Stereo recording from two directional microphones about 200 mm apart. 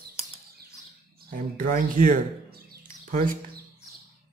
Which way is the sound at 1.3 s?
40° right (ahead or behind).